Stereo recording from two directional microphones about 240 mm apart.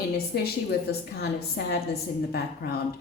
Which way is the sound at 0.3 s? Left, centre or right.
Left.